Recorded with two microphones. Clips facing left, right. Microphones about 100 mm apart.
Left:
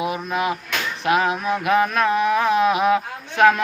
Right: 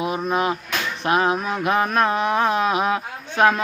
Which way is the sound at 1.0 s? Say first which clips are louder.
Even; 30° right (ahead or behind).